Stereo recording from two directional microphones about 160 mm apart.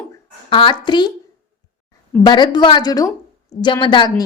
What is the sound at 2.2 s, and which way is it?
A woman's voice, 25° left (ahead or behind).